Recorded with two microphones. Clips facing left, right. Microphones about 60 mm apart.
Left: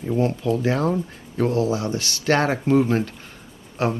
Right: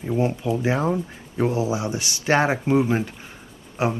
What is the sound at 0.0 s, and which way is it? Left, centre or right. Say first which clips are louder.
Speech: left 1 dB; centre.